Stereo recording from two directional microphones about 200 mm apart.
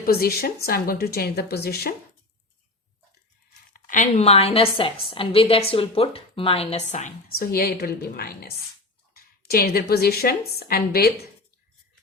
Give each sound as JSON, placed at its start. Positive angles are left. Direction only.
{"t": 0.0, "sound": "a woman's voice", "side_deg": 50}
{"t": 3.7, "sound": "a woman's voice", "side_deg": 40}
{"t": 7.3, "sound": "a woman's voice", "side_deg": 50}